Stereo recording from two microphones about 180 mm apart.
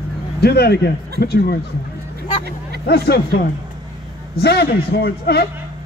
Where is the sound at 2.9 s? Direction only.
65° left (ahead or behind).